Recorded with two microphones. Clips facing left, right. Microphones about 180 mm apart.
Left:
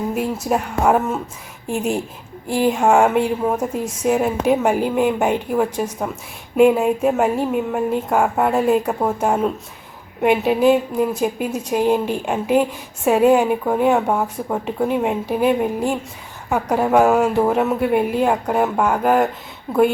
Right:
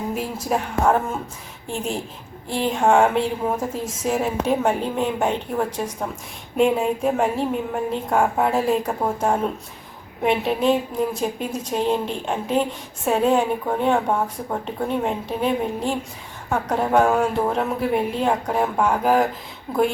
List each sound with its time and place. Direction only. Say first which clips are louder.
0.4 s a woman's voice: left 1 dB; 10° left (ahead or behind)